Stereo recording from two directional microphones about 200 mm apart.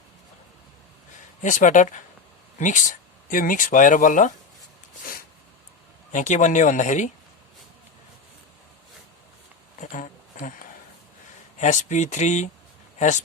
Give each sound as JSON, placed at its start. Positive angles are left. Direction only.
{"t": 1.4, "sound": "speech", "side_deg": 40}
{"t": 6.1, "sound": "speech", "side_deg": 40}
{"t": 9.8, "sound": "a sound", "side_deg": 35}
{"t": 11.6, "sound": "speech", "side_deg": 35}